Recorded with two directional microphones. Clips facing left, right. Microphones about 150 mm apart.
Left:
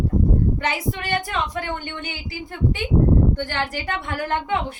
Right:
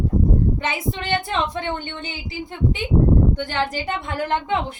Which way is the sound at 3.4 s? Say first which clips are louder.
Right 2 dB; 20° right (ahead or behind).